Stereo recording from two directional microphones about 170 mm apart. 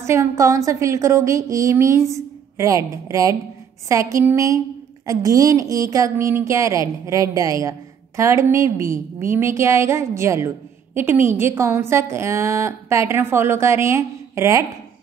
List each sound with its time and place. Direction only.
0.0 s a woman's voice: 15° right (ahead or behind)